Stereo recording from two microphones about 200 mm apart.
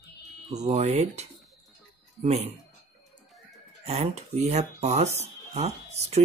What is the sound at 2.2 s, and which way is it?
Speech, 35° right (ahead or behind).